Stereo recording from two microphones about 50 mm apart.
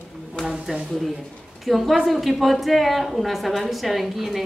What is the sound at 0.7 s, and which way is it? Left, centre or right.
Speech, centre.